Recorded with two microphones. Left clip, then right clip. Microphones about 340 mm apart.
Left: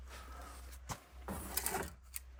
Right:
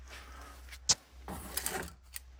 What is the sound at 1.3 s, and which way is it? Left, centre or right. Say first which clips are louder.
Sewing machine: right 2 dB; centre.